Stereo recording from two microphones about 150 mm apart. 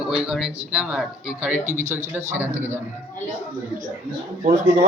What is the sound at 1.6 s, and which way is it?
Speech, 55° right (ahead or behind).